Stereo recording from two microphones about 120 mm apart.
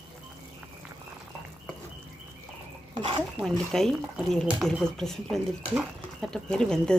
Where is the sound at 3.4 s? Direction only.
5° left (ahead or behind).